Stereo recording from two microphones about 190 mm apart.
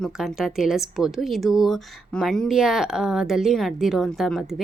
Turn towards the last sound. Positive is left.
turn(degrees=0)  # may be behind; listen again after turning